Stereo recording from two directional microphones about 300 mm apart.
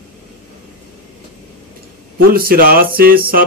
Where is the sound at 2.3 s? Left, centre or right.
Right.